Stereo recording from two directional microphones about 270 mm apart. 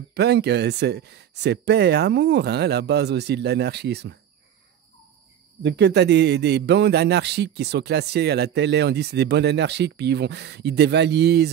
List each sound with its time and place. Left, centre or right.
0.1 s a man's voice: right
5.6 s a man's voice: right